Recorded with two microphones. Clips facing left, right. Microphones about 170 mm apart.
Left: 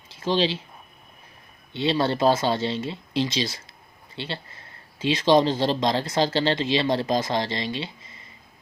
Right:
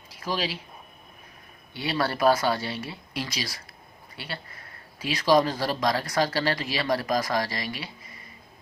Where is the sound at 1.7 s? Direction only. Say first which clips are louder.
Left 5 dB; 25° left (ahead or behind).